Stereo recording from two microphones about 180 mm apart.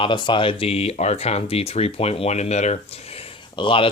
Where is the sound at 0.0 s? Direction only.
25° left (ahead or behind).